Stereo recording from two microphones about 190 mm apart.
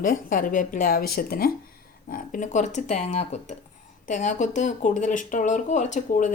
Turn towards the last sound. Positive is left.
turn(degrees=40)  # may be behind; listen again after turning